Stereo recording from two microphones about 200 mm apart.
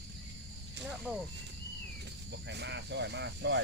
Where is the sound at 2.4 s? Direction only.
60° right (ahead or behind).